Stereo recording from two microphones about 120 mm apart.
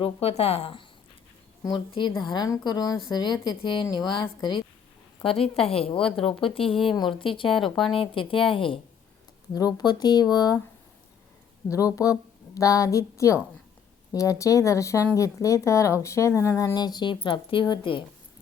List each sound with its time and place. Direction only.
0.0 s speech: 60° left (ahead or behind)
1.9 s a woman's voice: 40° left (ahead or behind)
5.2 s speech: 50° left (ahead or behind)
6.0 s speech: 5° left (ahead or behind)
6.5 s speech: 50° left (ahead or behind)
7.5 s speech: centre (ahead or behind)
7.9 s speech: 45° left (ahead or behind)
9.5 s a woman's voice: 35° left (ahead or behind)
11.7 s speech: 30° left (ahead or behind)
16.7 s speech: 35° left (ahead or behind)